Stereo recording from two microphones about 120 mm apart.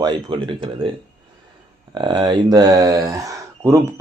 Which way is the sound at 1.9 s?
35° right (ahead or behind).